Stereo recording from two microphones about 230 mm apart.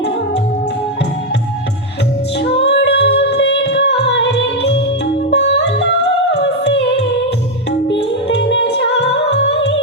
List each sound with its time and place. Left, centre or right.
2.6 s music: left